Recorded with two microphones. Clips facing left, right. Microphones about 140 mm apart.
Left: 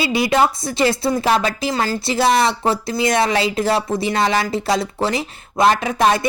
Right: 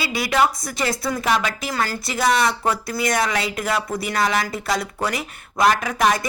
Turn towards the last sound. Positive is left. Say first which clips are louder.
# left 3 dB
turn(degrees=30)  # may be behind; listen again after turning